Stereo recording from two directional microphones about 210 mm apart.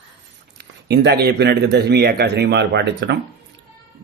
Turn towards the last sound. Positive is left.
turn(degrees=-55)  # may be behind; listen again after turning